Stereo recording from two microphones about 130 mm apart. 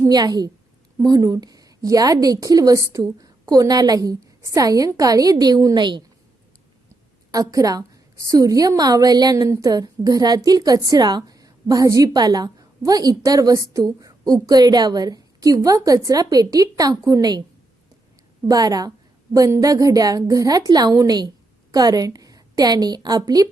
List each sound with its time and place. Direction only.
0.0 s a woman's voice: 30° right (ahead or behind)
7.3 s a woman's voice: 25° right (ahead or behind)
18.4 s a woman's voice: 30° right (ahead or behind)